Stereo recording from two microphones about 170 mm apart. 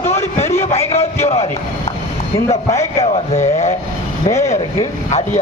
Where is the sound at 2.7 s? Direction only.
40° left (ahead or behind).